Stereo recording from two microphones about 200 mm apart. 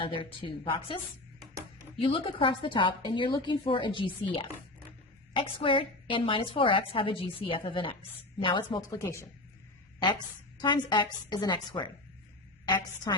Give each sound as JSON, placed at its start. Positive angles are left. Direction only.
{"t": 0.0, "sound": "a woman's voice", "side_deg": 25}
{"t": 2.0, "sound": "a woman's voice", "side_deg": 25}
{"t": 10.6, "sound": "a woman's voice", "side_deg": 20}
{"t": 13.1, "sound": "a woman's voice", "side_deg": 20}